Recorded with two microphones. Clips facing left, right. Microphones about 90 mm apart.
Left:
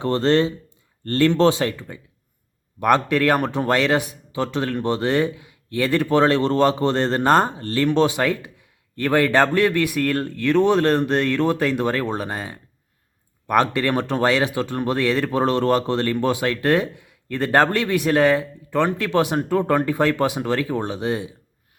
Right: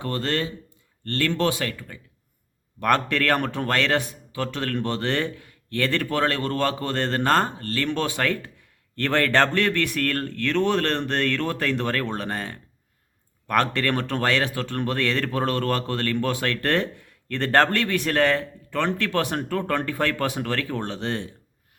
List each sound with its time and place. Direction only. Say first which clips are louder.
0.0 s speech: left 8 dB; 25° left (ahead or behind)
2.8 s speech: left 4 dB; 15° left (ahead or behind)